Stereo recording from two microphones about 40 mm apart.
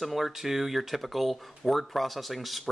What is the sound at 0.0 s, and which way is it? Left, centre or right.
Speech, centre.